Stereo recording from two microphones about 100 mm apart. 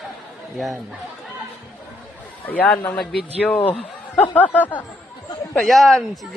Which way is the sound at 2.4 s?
15° left (ahead or behind).